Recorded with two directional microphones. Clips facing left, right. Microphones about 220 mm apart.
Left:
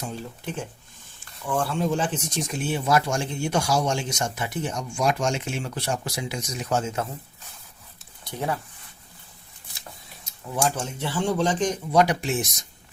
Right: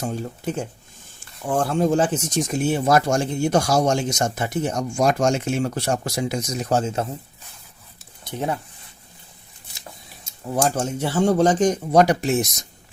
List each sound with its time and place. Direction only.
0.0 s speech: 45° right (ahead or behind)
8.2 s speech: 20° right (ahead or behind)
10.5 s speech: 40° right (ahead or behind)